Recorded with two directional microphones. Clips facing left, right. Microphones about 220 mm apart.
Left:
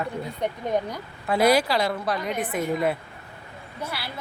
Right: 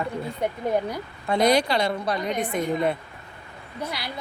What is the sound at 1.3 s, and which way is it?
A woman's voice, 5° left (ahead or behind).